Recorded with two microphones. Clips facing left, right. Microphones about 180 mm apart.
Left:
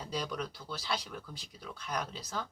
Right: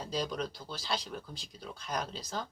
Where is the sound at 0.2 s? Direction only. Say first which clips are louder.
Right 4 dB; 30° right (ahead or behind).